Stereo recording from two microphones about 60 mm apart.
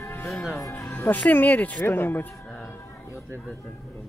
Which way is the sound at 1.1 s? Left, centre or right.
Left.